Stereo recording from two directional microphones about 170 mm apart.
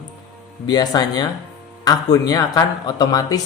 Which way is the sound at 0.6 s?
25° left (ahead or behind).